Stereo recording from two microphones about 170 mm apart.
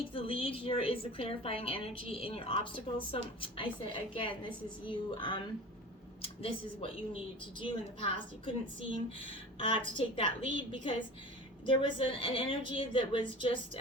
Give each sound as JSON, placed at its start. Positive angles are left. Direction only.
{"t": 0.1, "sound": "a woman's voice", "side_deg": 35}
{"t": 9.6, "sound": "a woman's voice", "side_deg": 35}